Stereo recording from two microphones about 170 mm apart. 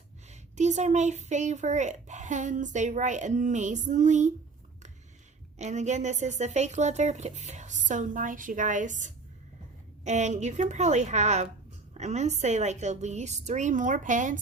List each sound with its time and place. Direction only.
0.3 s a child's voice: 45° right (ahead or behind)
5.5 s a child's voice: 45° right (ahead or behind)